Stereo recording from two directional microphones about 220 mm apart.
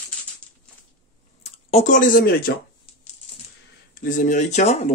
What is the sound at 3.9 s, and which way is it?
Speech, 35° left (ahead or behind).